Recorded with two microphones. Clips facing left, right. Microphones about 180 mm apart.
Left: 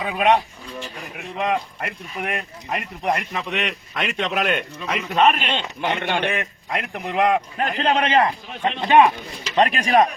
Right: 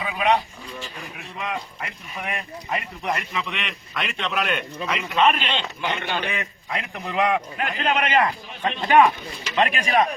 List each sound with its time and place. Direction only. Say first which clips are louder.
0.0 s a man's voice: left 3 dB; 55° left (ahead or behind)
6.0 s speech: left 4 dB; 65° left (ahead or behind)
7.2 s a man's voice: left 3 dB; 35° left (ahead or behind)
9.6 s a man's voice: left 4 dB; 40° left (ahead or behind)